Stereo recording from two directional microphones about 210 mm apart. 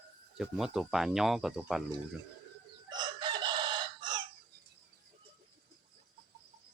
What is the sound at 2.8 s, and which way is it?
Chicken, 20° right (ahead or behind).